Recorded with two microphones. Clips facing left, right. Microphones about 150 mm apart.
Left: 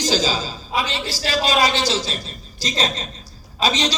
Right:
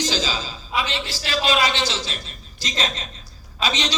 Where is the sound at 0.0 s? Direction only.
40° left (ahead or behind).